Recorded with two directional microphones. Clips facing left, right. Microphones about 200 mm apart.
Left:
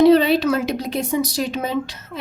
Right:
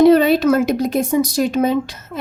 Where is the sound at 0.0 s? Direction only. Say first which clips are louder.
Right 2 dB; 50° right (ahead or behind).